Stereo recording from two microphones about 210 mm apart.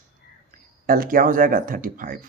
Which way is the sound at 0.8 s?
45° right (ahead or behind).